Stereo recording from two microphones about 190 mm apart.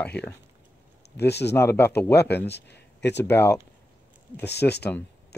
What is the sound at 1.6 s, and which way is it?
Speech, 10° left (ahead or behind).